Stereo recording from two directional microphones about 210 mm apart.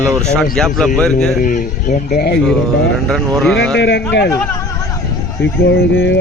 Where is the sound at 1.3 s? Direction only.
35° left (ahead or behind).